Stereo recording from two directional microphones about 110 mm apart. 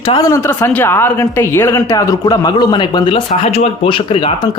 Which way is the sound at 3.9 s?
55° left (ahead or behind).